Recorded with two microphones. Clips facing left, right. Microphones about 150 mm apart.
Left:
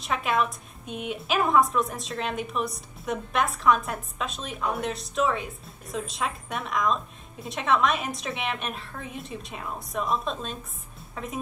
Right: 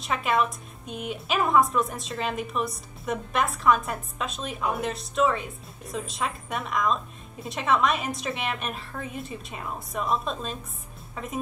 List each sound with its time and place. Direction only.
0.0 s a woman's voice: centre (ahead or behind)